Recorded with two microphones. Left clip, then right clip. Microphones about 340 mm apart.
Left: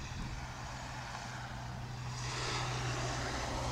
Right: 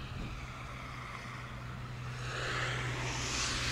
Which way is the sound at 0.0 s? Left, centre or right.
Left.